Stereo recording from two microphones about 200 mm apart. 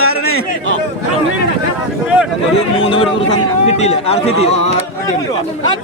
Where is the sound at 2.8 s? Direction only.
25° left (ahead or behind).